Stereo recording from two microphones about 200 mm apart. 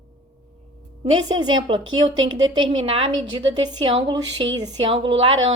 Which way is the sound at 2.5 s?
25° right (ahead or behind).